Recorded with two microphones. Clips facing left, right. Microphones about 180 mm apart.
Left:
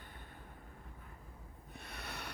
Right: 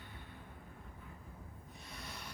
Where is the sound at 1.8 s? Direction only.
65° left (ahead or behind).